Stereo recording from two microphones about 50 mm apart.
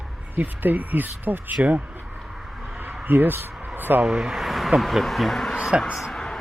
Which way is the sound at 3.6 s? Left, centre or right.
Right.